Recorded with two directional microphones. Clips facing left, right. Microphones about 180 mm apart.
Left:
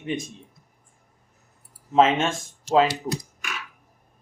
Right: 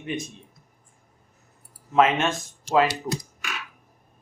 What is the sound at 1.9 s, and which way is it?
Speech, 25° left (ahead or behind).